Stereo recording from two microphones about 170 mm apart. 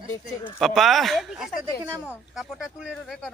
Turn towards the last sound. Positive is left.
turn(degrees=0)  # may be behind; listen again after turning